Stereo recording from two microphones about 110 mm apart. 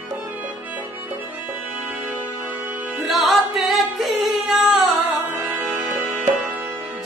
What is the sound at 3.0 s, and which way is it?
Music, centre (ahead or behind).